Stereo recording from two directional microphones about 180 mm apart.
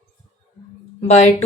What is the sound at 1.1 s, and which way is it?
Speech, 40° left (ahead or behind).